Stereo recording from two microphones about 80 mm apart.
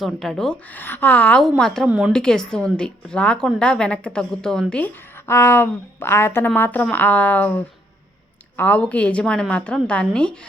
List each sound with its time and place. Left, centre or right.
0.0 s speech: centre
0.7 s a woman's voice: left
1.4 s speech: centre
1.9 s speech: centre
2.1 s a woman's voice: centre
5.3 s a woman's voice: left; by 10.3 s centre